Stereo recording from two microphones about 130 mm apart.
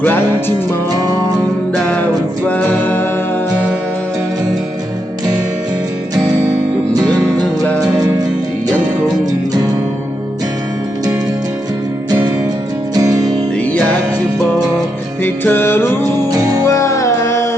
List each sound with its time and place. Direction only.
0.0 s music: 15° left (ahead or behind)
1.7 s music: 10° left (ahead or behind)
6.9 s music: 30° right (ahead or behind)
7.6 s music: 5° right (ahead or behind)
8.6 s music: 30° right (ahead or behind)
12.9 s music: 30° right (ahead or behind)
15.2 s music: 15° left (ahead or behind)
16.3 s music: 25° right (ahead or behind)
16.6 s music: 25° left (ahead or behind)